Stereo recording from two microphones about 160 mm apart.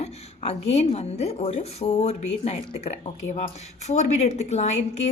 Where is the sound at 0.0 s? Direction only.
40° left (ahead or behind).